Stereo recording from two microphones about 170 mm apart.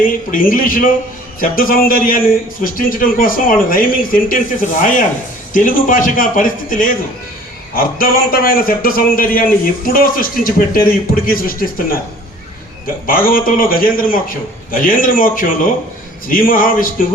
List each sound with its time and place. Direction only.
0.3 s a man's voice: 55° left (ahead or behind)
13.1 s a man's voice: 55° left (ahead or behind)